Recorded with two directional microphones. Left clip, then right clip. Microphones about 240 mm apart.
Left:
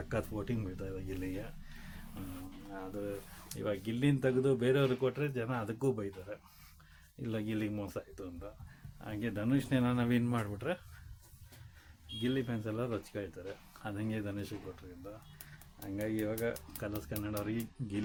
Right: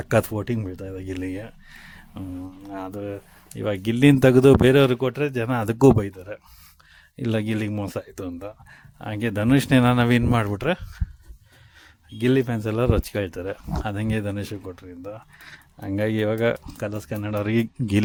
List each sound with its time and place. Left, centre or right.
0.0 s speech: right
12.2 s speech: right